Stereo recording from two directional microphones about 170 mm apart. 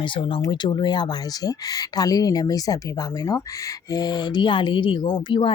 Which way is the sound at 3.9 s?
25° left (ahead or behind).